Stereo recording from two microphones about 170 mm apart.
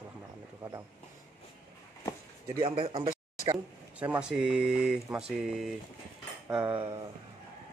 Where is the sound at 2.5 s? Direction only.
30° right (ahead or behind).